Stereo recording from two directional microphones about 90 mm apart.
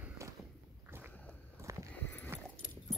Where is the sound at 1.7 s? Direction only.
35° right (ahead or behind).